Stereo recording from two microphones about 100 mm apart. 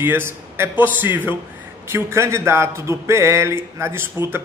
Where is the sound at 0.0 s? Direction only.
25° right (ahead or behind).